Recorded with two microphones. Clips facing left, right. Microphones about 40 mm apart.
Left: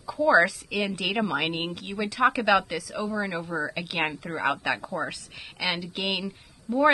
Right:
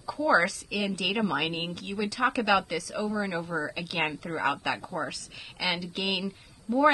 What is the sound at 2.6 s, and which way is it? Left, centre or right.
A woman's voice, centre.